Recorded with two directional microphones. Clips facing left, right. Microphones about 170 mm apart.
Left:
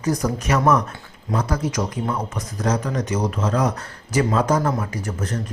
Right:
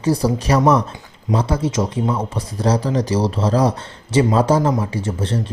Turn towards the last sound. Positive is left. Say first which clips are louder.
# right 5 dB
turn(degrees=-30)  # may be behind; listen again after turning